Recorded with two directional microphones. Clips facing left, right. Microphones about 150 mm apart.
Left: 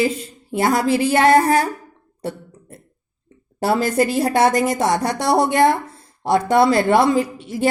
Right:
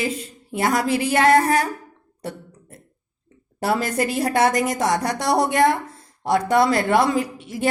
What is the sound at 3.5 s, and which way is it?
A woman's voice, 30° left (ahead or behind).